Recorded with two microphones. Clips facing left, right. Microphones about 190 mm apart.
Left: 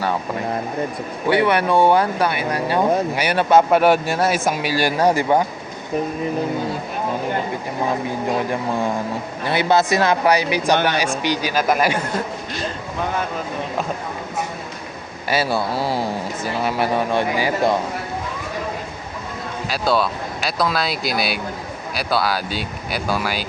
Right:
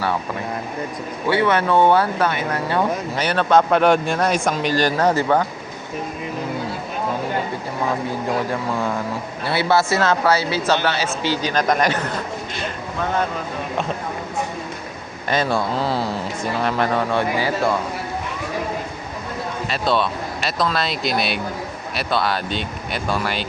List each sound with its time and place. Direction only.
1.3 s speech: 15° left (ahead or behind)
9.4 s speech: 20° left (ahead or behind)
15.3 s speech: 5° left (ahead or behind)
19.6 s speech: centre (ahead or behind)